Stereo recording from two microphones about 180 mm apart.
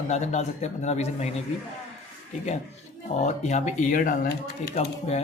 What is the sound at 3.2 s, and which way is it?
Speech, 40° left (ahead or behind).